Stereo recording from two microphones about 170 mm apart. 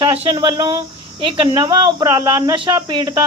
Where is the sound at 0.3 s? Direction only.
25° right (ahead or behind).